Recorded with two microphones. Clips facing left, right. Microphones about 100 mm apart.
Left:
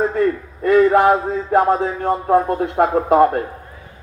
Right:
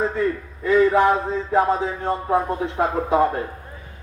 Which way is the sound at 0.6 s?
60° left (ahead or behind).